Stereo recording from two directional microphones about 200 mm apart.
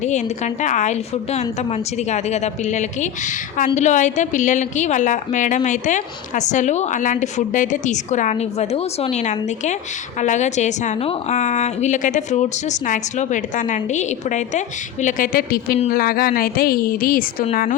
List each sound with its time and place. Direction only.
0.0 s a woman's voice: 35° left (ahead or behind)